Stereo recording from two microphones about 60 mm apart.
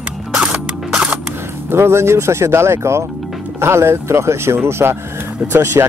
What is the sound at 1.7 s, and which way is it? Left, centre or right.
Speech, right.